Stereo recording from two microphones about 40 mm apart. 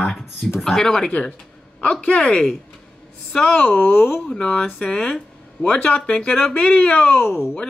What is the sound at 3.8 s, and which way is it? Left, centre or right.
Speech, left.